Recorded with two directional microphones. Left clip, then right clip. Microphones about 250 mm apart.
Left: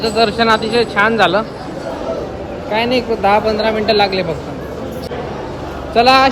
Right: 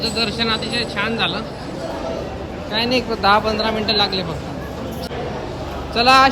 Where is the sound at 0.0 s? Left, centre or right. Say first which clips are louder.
Left 7 dB; centre.